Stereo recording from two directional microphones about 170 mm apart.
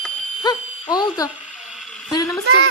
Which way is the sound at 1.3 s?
5° right (ahead or behind).